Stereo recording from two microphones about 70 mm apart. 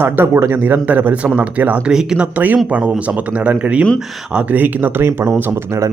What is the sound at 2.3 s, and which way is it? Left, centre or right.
Speech, right.